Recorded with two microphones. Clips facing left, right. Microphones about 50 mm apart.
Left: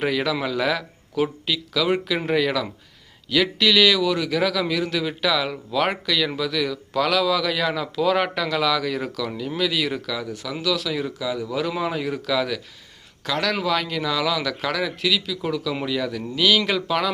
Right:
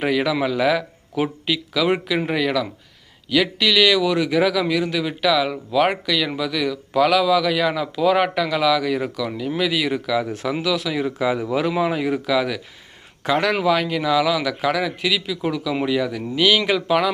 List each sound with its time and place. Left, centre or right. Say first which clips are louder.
0.0 s a man's voice: right 3 dB; centre
11.2 s speech: right 5 dB; right
11.6 s a man's voice: right 3 dB; centre
13.2 s a man's voice: right 5 dB; right